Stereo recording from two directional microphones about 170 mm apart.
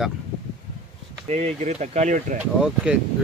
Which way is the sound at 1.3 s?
40° right (ahead or behind).